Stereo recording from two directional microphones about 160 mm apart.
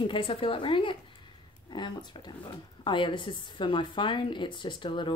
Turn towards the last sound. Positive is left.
turn(degrees=30)  # may be behind; listen again after turning